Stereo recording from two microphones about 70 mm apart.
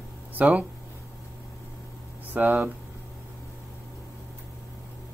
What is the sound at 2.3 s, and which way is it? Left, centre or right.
Speech, centre.